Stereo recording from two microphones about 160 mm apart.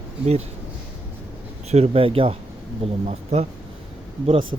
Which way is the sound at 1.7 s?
40° right (ahead or behind).